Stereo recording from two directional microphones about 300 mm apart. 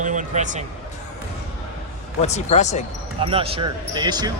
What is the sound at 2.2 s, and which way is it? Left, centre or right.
Speech, left.